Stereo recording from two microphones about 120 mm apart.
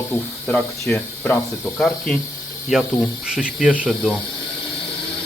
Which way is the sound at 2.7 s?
5° right (ahead or behind).